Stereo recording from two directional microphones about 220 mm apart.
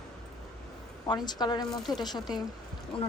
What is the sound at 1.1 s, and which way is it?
A woman's voice, 20° left (ahead or behind).